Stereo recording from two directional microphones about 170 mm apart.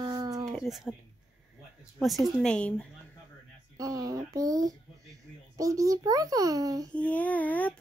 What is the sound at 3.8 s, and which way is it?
A child's voice, 20° right (ahead or behind).